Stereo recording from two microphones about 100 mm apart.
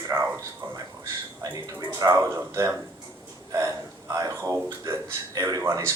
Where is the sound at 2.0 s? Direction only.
30° right (ahead or behind).